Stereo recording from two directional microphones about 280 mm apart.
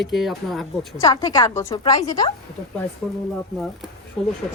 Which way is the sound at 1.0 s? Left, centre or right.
Centre.